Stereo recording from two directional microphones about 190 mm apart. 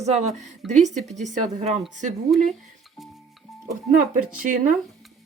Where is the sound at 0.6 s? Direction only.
Centre (ahead or behind).